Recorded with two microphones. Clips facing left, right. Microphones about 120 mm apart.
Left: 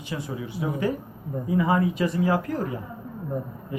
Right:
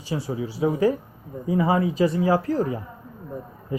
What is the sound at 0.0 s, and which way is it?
Speech, 30° right (ahead or behind).